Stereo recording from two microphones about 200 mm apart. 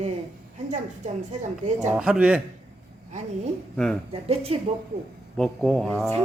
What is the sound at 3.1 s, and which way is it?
A woman's voice, 35° right (ahead or behind).